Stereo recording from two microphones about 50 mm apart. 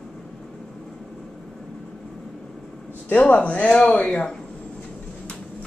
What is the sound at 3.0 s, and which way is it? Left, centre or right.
Speech, left.